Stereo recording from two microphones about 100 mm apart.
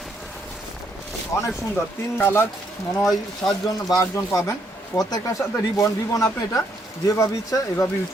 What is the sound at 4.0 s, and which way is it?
Speech, 35° left (ahead or behind).